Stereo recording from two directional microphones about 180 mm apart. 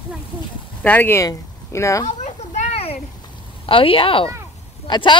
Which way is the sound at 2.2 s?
40° left (ahead or behind).